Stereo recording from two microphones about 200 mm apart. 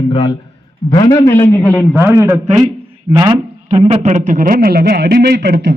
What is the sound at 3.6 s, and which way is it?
A man's voice, 30° right (ahead or behind).